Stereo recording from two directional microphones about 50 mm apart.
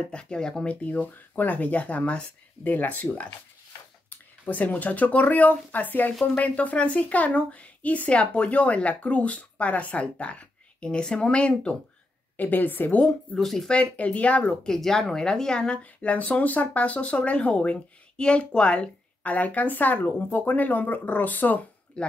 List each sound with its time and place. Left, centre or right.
0.1 s speech: centre
0.8 s speech: left
4.5 s speech: left
12.4 s speech: left
13.4 s speech: centre
13.7 s speech: left
14.6 s speech: centre
15.8 s speech: left
22.0 s speech: centre